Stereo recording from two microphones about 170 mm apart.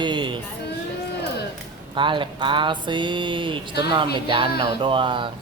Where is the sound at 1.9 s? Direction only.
30° right (ahead or behind).